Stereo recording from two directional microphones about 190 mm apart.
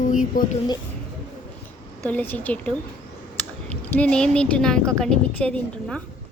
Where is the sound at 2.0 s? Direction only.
10° left (ahead or behind).